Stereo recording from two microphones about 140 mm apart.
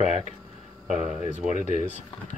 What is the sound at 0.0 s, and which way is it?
Speech, 55° left (ahead or behind).